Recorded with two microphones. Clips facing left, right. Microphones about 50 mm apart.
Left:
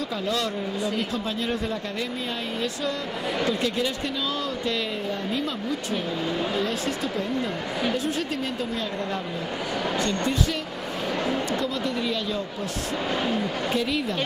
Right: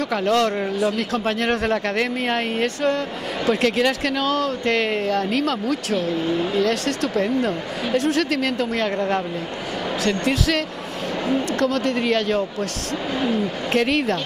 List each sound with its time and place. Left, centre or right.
0.1 s speech: right
0.7 s speech: right
3.4 s speech: right
9.9 s speech: right
11.5 s speech: right
13.7 s speech: right